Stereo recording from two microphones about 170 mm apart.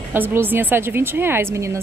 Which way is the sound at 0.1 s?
15° right (ahead or behind).